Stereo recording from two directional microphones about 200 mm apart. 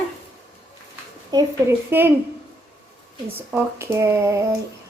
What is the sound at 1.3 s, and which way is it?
Speech, 20° right (ahead or behind).